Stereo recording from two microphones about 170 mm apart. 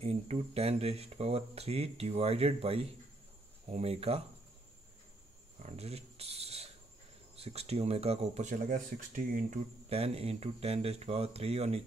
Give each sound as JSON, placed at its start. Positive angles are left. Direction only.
{"t": 0.0, "sound": "speech", "side_deg": -35}
{"t": 5.6, "sound": "a sound", "side_deg": -40}
{"t": 7.3, "sound": "speech", "side_deg": -35}
{"t": 9.8, "sound": "speech", "side_deg": -35}